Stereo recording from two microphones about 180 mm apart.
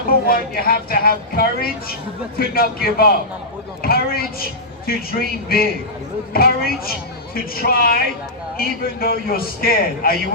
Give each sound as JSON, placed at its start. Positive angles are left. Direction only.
{"t": 0.3, "sound": "speech", "side_deg": 55}
{"t": 3.8, "sound": "a sound", "side_deg": 55}
{"t": 4.9, "sound": "speech", "side_deg": 55}